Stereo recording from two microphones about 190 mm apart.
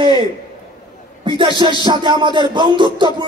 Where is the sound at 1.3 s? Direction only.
25° right (ahead or behind).